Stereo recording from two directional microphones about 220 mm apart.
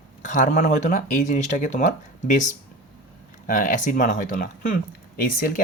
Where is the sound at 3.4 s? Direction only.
35° left (ahead or behind).